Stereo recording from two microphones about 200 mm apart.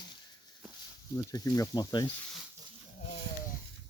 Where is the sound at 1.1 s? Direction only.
15° left (ahead or behind).